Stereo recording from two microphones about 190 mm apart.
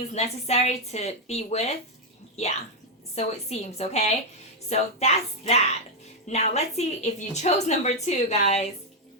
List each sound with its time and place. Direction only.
0.1 s a woman's voice: 35° left (ahead or behind)